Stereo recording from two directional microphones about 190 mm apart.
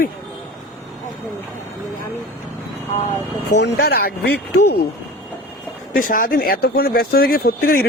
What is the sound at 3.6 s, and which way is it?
Speech, 55° left (ahead or behind).